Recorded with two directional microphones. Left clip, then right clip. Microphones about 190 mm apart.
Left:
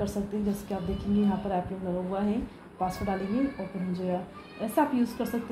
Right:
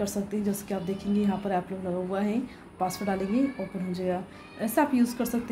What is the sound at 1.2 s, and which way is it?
A woman's voice, 20° right (ahead or behind).